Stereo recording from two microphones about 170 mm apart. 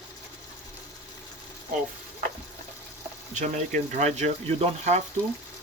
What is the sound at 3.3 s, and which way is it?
Speech, 45° right (ahead or behind).